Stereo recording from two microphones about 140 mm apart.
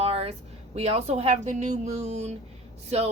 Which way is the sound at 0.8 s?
50° right (ahead or behind).